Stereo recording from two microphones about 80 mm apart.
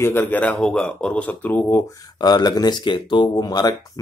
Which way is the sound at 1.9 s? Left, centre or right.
Left.